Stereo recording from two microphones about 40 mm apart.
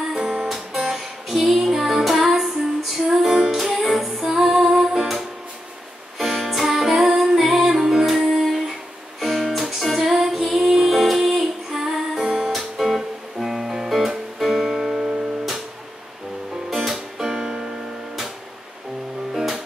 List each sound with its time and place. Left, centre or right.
0.1 s music: centre
0.7 s music: centre
4.2 s female singing: centre
4.5 s music: centre
6.1 s music: centre
12.4 s guitar: centre
16.7 s music: centre
19.3 s music: centre